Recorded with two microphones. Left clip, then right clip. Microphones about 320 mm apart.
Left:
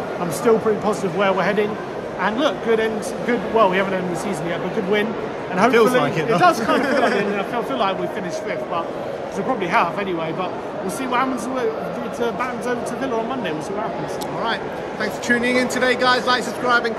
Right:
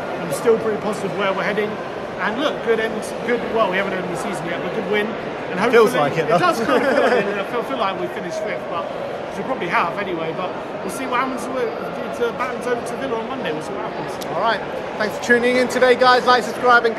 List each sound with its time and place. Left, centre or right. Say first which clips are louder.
0.5 s a man's voice: left 1 dB; centre
5.7 s speech: right 3 dB; centre
12.2 s a man's voice: right 1 dB; centre
14.4 s speech: right 5 dB; centre